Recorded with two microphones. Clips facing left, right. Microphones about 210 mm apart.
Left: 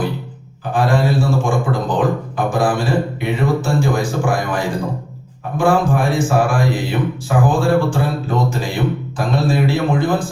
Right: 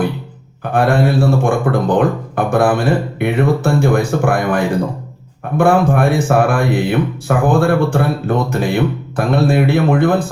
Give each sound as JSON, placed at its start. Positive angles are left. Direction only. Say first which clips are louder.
{"t": 0.7, "sound": "speech", "louder": "right 3 dB", "side_deg": -60}